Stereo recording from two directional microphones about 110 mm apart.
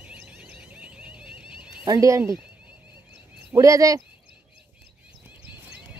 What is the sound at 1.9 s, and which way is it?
Speech, 30° right (ahead or behind).